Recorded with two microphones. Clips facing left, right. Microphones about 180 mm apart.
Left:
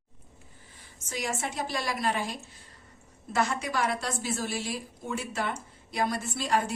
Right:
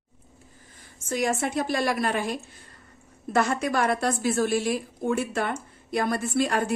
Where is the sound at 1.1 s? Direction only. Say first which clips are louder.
Right 8 dB; 50° right (ahead or behind).